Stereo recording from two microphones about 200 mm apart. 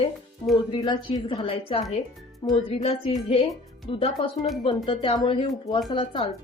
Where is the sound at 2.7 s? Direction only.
30° left (ahead or behind).